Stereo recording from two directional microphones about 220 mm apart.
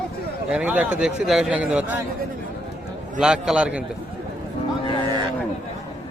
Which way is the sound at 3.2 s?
5° right (ahead or behind).